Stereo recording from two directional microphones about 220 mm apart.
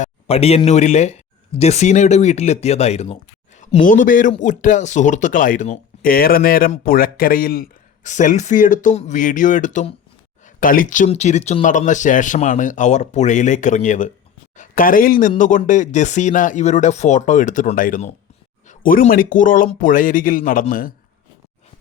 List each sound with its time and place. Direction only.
0.0 s speech: 25° left (ahead or behind)